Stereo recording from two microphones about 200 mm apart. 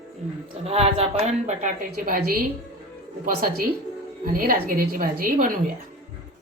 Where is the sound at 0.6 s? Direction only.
30° right (ahead or behind).